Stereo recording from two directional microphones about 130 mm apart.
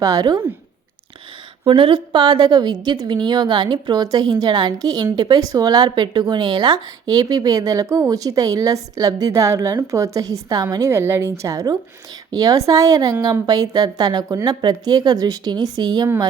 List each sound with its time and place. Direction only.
0.0 s speech: 30° right (ahead or behind)
1.6 s a woman's voice: 40° right (ahead or behind)